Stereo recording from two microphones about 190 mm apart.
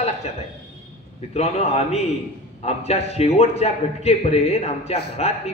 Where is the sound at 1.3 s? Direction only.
35° left (ahead or behind).